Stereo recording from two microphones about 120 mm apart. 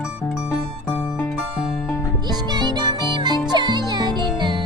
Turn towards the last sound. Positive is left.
turn(degrees=-40)  # may be behind; listen again after turning